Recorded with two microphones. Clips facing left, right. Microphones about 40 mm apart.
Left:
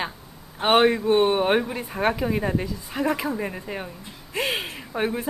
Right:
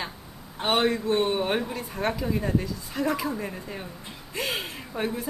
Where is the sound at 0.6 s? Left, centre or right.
Left.